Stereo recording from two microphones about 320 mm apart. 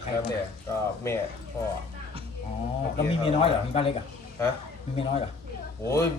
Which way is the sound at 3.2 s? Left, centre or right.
Centre.